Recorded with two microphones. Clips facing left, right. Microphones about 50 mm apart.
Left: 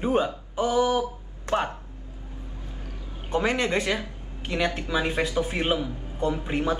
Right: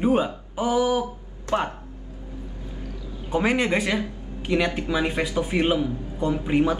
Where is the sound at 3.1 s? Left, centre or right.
Left.